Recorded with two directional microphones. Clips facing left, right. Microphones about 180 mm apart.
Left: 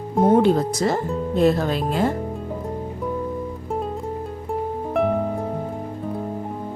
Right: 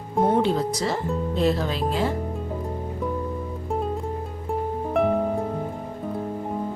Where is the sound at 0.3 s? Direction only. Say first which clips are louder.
Left 5 dB; 50° left (ahead or behind).